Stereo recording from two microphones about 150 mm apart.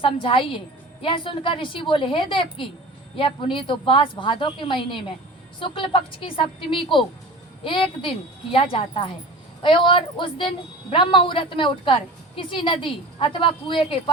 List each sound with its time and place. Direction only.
0.0 s a woman's voice: 35° left (ahead or behind)